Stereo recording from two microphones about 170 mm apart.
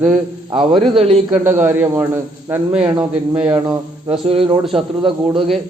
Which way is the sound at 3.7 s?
30° right (ahead or behind).